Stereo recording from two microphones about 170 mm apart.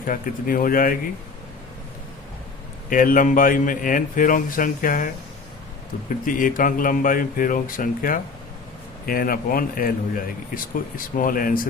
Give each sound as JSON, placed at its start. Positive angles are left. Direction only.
{"t": 0.0, "sound": "speech", "side_deg": 55}
{"t": 2.9, "sound": "speech", "side_deg": 50}
{"t": 6.2, "sound": "speech", "side_deg": 55}